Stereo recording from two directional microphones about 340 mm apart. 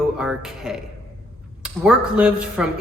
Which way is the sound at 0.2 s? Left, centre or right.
Centre.